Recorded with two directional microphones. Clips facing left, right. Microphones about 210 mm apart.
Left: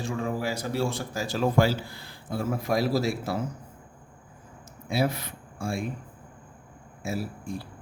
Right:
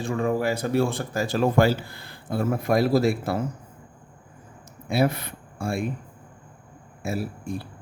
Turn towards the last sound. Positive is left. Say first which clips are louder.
# right 3 dB
turn(degrees=-60)  # may be behind; listen again after turning